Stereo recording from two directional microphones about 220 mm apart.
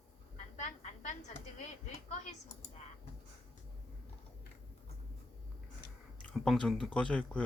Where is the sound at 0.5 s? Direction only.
35° left (ahead or behind).